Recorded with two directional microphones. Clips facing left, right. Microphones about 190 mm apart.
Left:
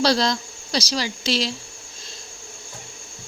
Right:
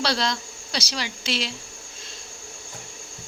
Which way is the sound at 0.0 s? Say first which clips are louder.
Left 6 dB; 40° left (ahead or behind).